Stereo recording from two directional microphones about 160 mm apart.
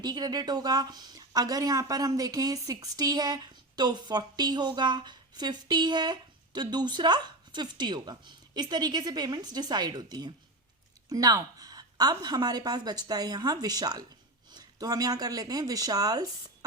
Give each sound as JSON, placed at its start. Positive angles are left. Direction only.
{"t": 0.0, "sound": "speech", "side_deg": -25}